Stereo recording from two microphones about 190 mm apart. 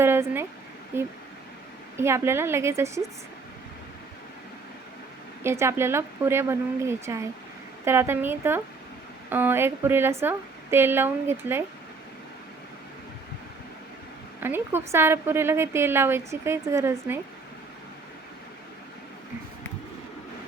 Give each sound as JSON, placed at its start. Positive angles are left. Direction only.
{"t": 0.0, "sound": "a woman's voice", "side_deg": -10}
{"t": 5.4, "sound": "a woman's voice", "side_deg": -15}
{"t": 14.4, "sound": "a woman's voice", "side_deg": -10}